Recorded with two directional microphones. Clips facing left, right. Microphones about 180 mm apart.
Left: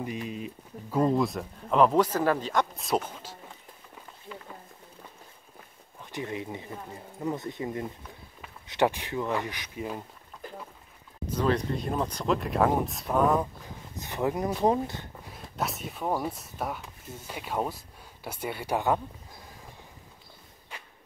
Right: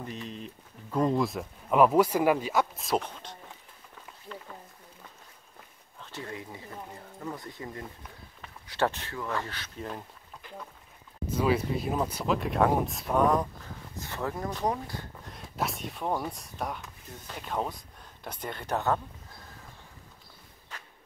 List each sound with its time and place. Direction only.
0.0 s speech: 10° left (ahead or behind)
4.3 s a sound: 10° left (ahead or behind)
5.9 s speech: 15° left (ahead or behind)
10.4 s a sound: 40° left (ahead or behind)
11.3 s speech: 5° right (ahead or behind)
13.9 s speech: 20° left (ahead or behind)
15.2 s speech: centre (ahead or behind)